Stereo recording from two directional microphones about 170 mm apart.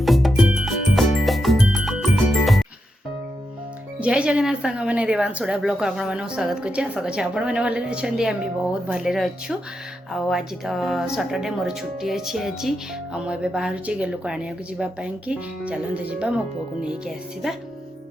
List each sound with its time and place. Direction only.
0.0 s music: centre (ahead or behind)
4.0 s a woman's voice: 5° right (ahead or behind)